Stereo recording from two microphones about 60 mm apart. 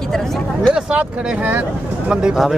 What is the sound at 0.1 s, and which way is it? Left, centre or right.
Speech, centre.